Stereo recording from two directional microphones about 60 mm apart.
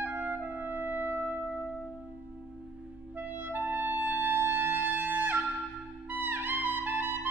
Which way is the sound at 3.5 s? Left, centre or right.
Right.